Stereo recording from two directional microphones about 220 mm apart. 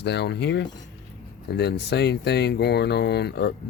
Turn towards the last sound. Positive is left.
turn(degrees=50)  # may be behind; listen again after turning